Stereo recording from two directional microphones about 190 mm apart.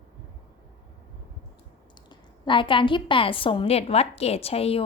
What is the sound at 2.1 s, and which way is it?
A woman's voice, 25° left (ahead or behind).